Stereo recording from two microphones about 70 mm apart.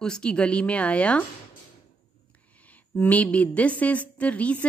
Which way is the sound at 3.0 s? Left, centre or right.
Left.